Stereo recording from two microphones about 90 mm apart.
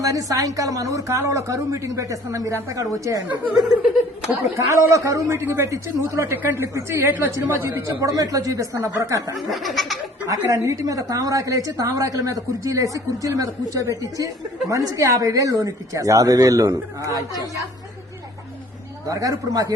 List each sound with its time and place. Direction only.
0.0 s a woman's voice: 40° right (ahead or behind)
3.2 s speech: 20° right (ahead or behind)
4.5 s a woman's voice: 35° right (ahead or behind)
5.3 s a woman's voice: 30° right (ahead or behind)
9.5 s laughter: centre (ahead or behind)
10.2 s a woman's voice: 40° right (ahead or behind)
19.0 s a woman's voice: 40° right (ahead or behind)